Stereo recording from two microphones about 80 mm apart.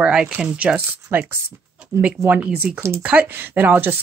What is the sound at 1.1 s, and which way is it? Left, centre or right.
Speech, right.